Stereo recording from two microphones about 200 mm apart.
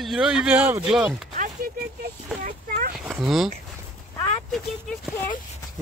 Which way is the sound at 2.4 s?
45° right (ahead or behind).